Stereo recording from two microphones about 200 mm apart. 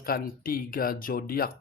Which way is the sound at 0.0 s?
45° left (ahead or behind).